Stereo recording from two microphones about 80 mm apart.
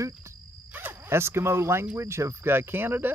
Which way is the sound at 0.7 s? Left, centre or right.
Right.